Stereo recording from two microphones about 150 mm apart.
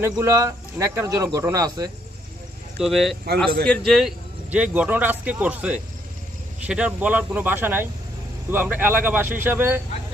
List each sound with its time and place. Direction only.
0.0 s speech: 15° right (ahead or behind)
2.7 s speech: centre (ahead or behind)